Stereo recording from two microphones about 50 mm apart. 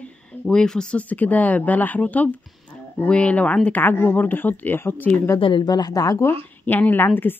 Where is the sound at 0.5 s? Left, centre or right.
Centre.